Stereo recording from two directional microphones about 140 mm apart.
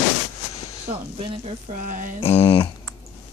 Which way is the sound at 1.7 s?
75° right (ahead or behind).